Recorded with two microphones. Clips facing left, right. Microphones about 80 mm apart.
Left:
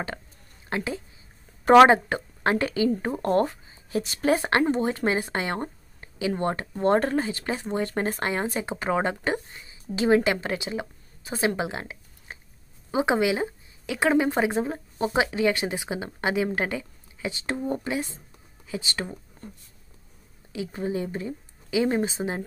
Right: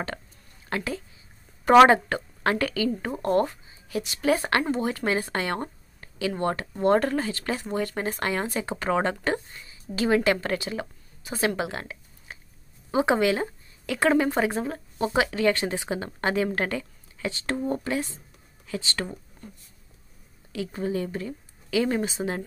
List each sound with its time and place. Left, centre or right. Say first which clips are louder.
0.7 s a woman's voice: left 1 dB; left
3.2 s speech: right 2 dB; left
7.9 s speech: left 2 dB; left
8.2 s speech: even; left
19.4 s speech: left 4 dB; left
20.8 s speech: even; left